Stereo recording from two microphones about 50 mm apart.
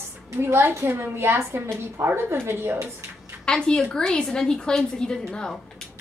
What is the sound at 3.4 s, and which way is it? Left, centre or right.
A woman's voice, centre.